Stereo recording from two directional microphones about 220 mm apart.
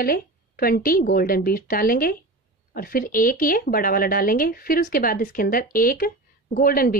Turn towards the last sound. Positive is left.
turn(degrees=40)  # may be behind; listen again after turning